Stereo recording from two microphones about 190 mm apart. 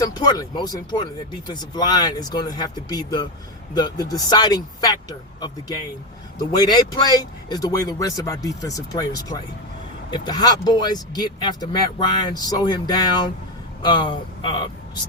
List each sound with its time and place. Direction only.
0.0 s speech: 20° left (ahead or behind)
6.5 s speech: 20° left (ahead or behind)